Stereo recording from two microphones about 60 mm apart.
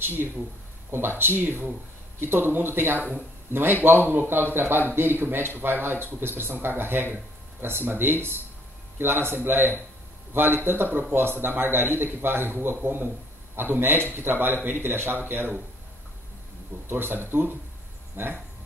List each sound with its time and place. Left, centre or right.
0.0 s speech: right
3.0 s speech: right
3.5 s speech: right
16.9 s speech: right